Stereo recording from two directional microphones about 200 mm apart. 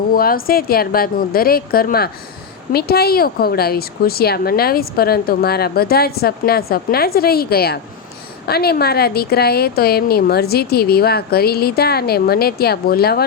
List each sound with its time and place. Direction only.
0.1 s a woman's voice: 45° left (ahead or behind)